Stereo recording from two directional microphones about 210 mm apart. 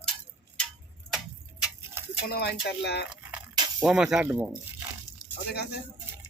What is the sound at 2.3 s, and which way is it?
Speech, 50° left (ahead or behind).